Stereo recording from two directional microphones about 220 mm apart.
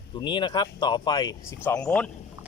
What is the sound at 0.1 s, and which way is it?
Speech, 20° left (ahead or behind).